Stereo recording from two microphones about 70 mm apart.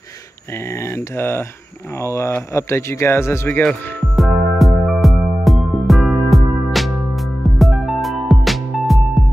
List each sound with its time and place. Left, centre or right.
0.5 s a man's voice: left
4.1 s music: centre